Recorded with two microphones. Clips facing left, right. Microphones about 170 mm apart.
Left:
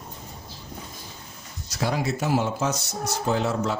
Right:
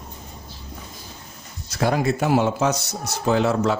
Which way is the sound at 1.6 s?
55° right (ahead or behind).